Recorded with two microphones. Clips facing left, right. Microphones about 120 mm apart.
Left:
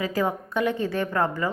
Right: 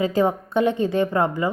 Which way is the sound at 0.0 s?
25° right (ahead or behind).